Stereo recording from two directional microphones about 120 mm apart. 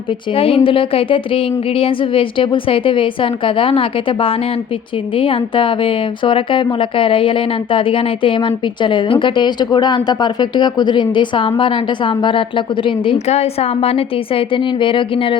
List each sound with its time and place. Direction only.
0.3 s a woman's voice: 50° left (ahead or behind)
13.1 s a woman's voice: 65° left (ahead or behind); by 15.4 s 45° left (ahead or behind)